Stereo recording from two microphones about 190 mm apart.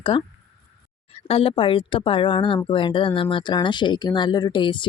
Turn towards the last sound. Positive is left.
turn(degrees=25)  # may be behind; listen again after turning